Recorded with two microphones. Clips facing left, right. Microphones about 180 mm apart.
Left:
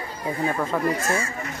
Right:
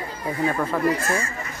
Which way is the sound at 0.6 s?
Centre (ahead or behind).